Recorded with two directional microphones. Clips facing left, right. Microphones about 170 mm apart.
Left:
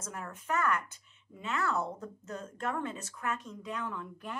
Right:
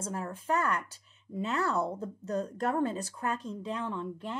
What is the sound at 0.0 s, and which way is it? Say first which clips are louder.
Speech: right 6 dB; 30° right (ahead or behind).